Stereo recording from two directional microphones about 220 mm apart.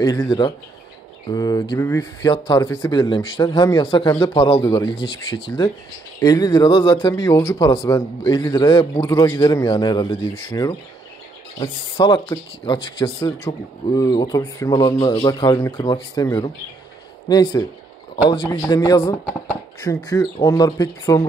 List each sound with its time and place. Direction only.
0.0 s speech: 15° left (ahead or behind)